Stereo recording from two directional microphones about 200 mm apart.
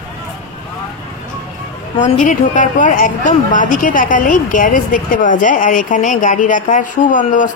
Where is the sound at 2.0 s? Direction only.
40° left (ahead or behind).